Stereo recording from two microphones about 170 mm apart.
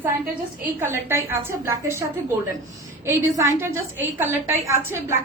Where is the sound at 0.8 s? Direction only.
15° right (ahead or behind).